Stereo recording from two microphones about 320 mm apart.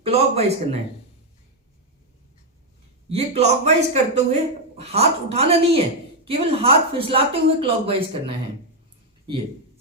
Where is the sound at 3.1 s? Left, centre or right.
Centre.